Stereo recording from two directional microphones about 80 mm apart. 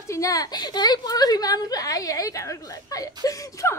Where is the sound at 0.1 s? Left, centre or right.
Left.